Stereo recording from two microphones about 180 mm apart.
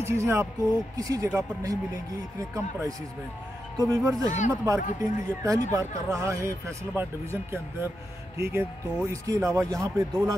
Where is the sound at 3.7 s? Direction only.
20° right (ahead or behind).